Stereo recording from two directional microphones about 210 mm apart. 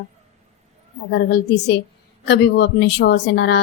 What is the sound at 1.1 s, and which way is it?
A woman's voice, 50° left (ahead or behind).